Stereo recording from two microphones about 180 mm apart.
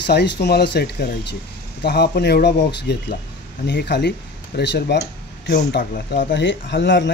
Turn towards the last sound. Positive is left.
turn(degrees=85)